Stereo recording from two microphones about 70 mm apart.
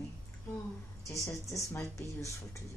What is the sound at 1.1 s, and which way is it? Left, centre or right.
Speech, left.